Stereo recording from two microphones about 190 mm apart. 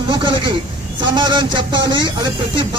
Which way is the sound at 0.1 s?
25° right (ahead or behind).